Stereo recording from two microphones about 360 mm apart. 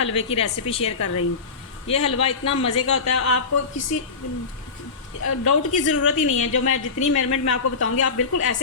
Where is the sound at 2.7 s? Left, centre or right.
Left.